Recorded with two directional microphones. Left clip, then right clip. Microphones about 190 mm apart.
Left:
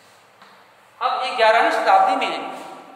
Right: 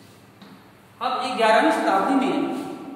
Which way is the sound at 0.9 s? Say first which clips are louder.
Left 3 dB; 10° left (ahead or behind).